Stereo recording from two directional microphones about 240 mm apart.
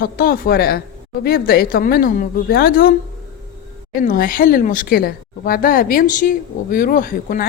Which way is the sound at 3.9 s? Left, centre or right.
Left.